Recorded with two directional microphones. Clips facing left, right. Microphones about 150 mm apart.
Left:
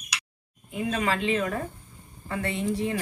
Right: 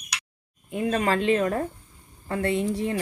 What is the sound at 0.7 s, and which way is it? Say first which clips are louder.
A woman's voice: right 3 dB; 45° right (ahead or behind).